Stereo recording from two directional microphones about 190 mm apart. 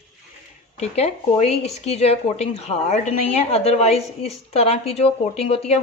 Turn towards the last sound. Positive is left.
turn(degrees=30)  # may be behind; listen again after turning